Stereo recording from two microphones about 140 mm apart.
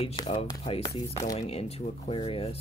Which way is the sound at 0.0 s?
40° left (ahead or behind).